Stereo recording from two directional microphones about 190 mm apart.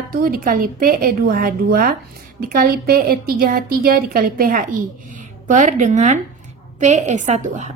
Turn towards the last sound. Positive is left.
turn(degrees=-40)  # may be behind; listen again after turning